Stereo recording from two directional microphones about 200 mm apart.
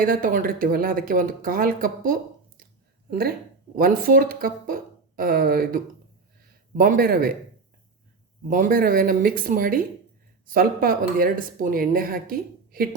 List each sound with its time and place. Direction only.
0.0 s speech: 45° right (ahead or behind)
8.4 s speech: 45° right (ahead or behind)